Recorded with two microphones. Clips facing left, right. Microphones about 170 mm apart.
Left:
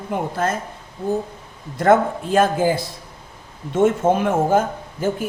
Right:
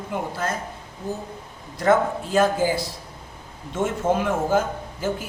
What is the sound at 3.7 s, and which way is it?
Speech, 55° left (ahead or behind).